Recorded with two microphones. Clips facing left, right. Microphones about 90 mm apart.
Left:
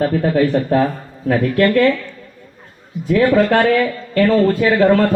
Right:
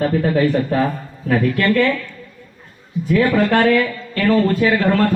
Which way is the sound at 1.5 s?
20° left (ahead or behind).